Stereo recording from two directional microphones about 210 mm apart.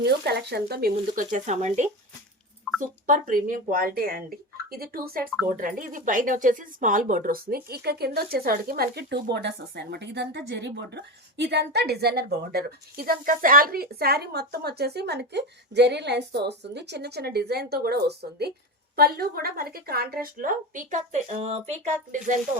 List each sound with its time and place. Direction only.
0.0 s speech: 50° right (ahead or behind)